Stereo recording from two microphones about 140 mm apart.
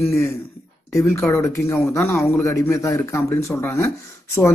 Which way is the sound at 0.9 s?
20° left (ahead or behind).